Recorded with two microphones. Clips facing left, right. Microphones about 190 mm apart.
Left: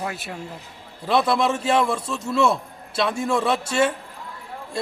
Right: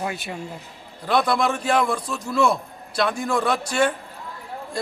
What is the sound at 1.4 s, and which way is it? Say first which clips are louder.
A man's voice: left 1 dB; 25° left (ahead or behind).